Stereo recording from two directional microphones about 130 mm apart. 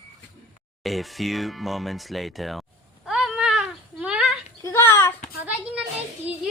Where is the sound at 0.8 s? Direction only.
Centre (ahead or behind).